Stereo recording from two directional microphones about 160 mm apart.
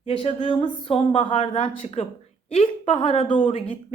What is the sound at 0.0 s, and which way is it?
A woman's voice, 35° left (ahead or behind).